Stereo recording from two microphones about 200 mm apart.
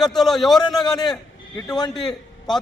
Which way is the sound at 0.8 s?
20° left (ahead or behind).